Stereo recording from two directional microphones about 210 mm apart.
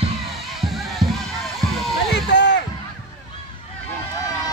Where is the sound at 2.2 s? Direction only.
55° left (ahead or behind).